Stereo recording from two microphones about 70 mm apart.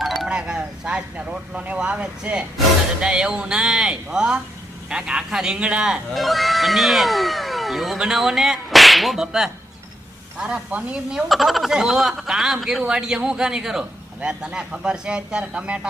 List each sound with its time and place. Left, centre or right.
0.0 s wind chime: centre
0.3 s a man's voice: centre
6.1 s a man's voice: centre
11.3 s a man's voice: centre